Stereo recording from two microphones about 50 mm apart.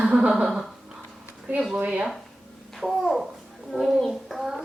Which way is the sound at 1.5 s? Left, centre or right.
Right.